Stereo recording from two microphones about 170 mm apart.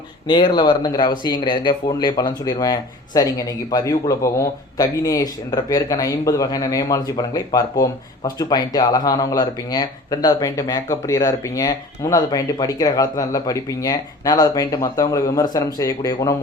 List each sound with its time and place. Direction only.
0.3 s speech: 25° left (ahead or behind)